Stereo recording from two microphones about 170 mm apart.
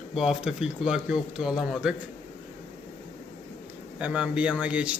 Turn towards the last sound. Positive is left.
turn(degrees=-5)  # may be behind; listen again after turning